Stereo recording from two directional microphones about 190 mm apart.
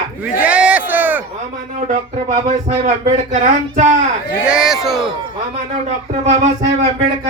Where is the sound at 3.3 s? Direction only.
40° right (ahead or behind).